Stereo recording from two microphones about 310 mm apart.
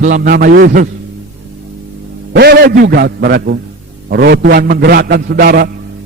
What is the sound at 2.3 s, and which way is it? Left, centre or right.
A man's voice, right.